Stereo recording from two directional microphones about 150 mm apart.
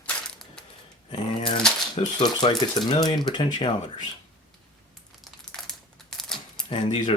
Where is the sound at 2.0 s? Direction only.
30° left (ahead or behind).